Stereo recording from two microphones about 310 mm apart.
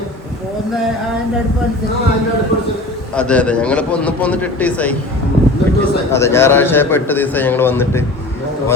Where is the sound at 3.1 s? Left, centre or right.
Centre.